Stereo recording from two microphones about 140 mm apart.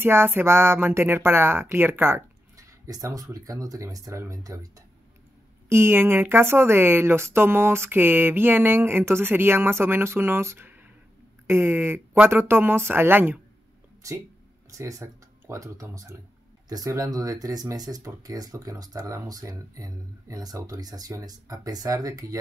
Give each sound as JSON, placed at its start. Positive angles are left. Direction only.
{"t": 0.0, "sound": "speech", "side_deg": -15}
{"t": 14.8, "sound": "speech", "side_deg": -20}